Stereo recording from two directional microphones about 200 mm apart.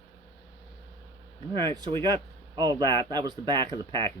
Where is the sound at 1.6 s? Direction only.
20° right (ahead or behind).